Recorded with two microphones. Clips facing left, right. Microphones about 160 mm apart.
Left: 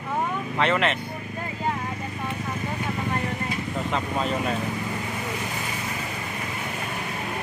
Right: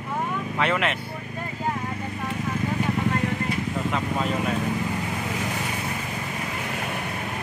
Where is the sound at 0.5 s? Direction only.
5° right (ahead or behind).